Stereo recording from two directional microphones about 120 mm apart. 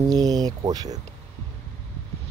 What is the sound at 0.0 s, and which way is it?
Speech, 30° right (ahead or behind).